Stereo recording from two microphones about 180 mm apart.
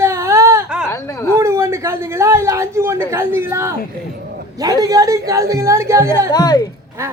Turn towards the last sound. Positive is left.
turn(degrees=20)  # may be behind; listen again after turning